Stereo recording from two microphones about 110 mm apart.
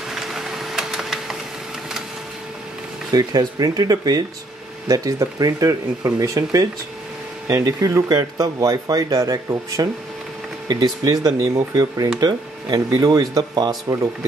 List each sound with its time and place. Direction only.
0.1 s printer: 5° right (ahead or behind)
3.1 s speech: 35° right (ahead or behind)